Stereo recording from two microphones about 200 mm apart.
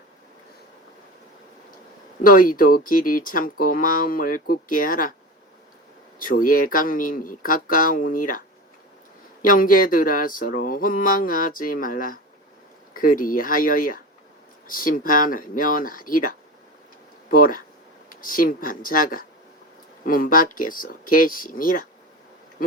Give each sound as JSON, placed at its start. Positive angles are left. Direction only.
{"t": 2.2, "sound": "speech", "side_deg": 45}
{"t": 6.1, "sound": "speech", "side_deg": 45}
{"t": 17.3, "sound": "speech", "side_deg": 45}